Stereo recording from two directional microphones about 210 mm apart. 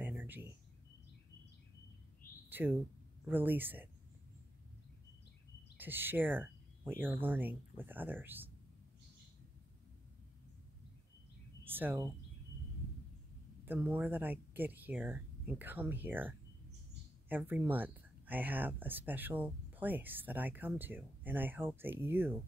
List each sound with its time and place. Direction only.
0.0 s a sound: 10° right (ahead or behind)
2.5 s speech: 10° right (ahead or behind)
5.8 s speech: 10° right (ahead or behind)
11.6 s speech: 10° right (ahead or behind)
13.7 s speech: 10° right (ahead or behind)